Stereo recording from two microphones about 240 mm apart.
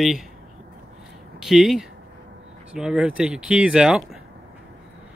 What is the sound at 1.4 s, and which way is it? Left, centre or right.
Speech, centre.